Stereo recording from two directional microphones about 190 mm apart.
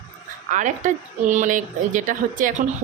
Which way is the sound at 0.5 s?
40° right (ahead or behind).